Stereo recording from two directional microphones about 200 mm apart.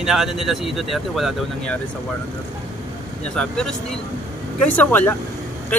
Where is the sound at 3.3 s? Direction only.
5° left (ahead or behind).